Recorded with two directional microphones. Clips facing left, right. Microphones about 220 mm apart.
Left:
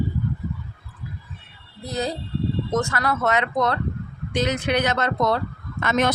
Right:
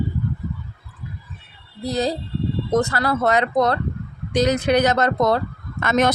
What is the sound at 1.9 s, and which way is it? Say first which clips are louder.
Speech: right 4 dB; 35° right (ahead or behind).